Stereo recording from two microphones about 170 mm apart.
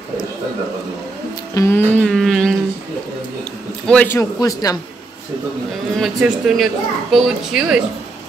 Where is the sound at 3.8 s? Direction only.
5° left (ahead or behind).